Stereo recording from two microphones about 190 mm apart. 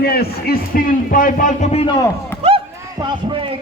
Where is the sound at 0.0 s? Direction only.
55° left (ahead or behind); by 2.0 s 30° left (ahead or behind).